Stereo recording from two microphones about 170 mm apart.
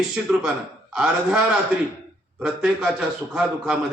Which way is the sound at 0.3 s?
5° right (ahead or behind).